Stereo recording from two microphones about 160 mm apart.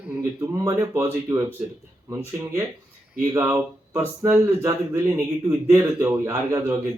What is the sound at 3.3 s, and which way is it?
Speech, 15° right (ahead or behind).